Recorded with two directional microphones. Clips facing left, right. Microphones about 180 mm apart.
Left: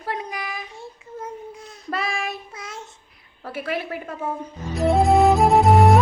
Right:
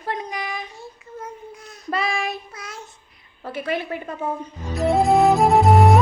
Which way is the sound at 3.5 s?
5° left (ahead or behind).